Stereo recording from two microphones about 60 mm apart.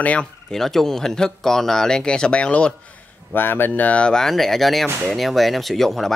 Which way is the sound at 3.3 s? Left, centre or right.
Left.